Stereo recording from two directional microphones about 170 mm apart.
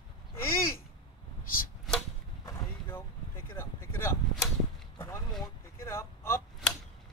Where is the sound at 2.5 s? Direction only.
15° left (ahead or behind).